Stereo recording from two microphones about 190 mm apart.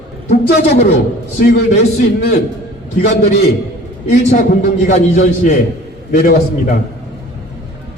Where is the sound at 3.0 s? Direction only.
50° left (ahead or behind).